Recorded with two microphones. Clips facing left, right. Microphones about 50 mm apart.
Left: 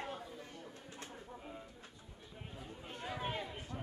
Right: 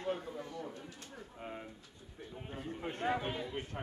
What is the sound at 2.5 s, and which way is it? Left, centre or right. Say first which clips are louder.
Chatter: right 9 dB; right.